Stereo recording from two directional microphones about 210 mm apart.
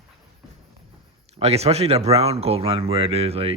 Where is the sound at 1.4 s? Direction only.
30° right (ahead or behind).